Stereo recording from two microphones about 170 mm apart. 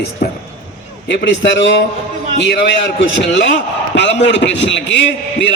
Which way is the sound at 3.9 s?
90° left.